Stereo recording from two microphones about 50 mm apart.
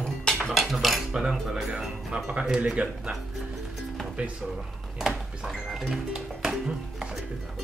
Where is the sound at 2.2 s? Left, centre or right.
Centre.